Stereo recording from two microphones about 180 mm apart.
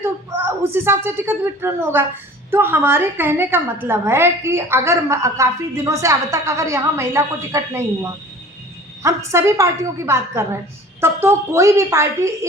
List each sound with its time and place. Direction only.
0.6 s a woman's voice: 15° right (ahead or behind)
9.0 s a woman's voice: 15° right (ahead or behind)